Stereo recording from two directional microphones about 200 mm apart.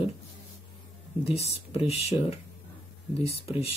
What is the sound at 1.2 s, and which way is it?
Speech, 30° left (ahead or behind).